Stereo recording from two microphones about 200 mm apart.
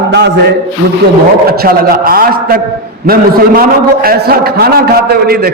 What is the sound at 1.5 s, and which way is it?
A man's voice, 50° right (ahead or behind).